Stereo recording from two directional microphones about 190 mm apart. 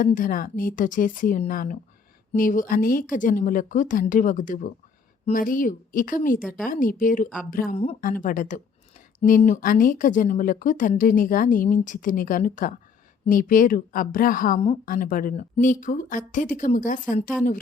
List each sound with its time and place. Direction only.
0.0 s a woman's voice: 45° left (ahead or behind)